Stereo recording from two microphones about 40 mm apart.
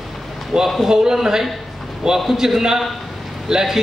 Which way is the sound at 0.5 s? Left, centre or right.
Centre.